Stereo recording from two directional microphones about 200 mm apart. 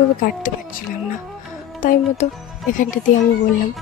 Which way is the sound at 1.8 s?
40° left (ahead or behind).